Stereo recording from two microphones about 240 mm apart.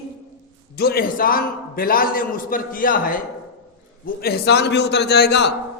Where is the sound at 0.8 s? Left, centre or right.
Left.